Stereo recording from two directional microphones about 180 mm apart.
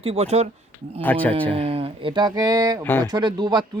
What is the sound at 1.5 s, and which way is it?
Speech, 35° right (ahead or behind).